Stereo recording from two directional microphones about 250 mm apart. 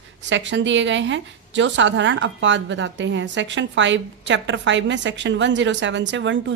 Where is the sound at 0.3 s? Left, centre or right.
Right.